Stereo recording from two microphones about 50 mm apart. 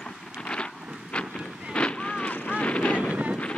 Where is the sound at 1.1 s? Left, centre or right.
Left.